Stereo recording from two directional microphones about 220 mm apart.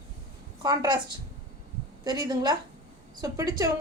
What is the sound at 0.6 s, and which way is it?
Speech, 15° right (ahead or behind).